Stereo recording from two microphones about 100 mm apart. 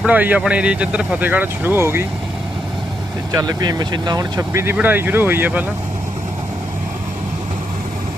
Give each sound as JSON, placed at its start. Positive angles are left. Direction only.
{"t": 0.0, "sound": "speech", "side_deg": -15}
{"t": 3.3, "sound": "speech", "side_deg": -45}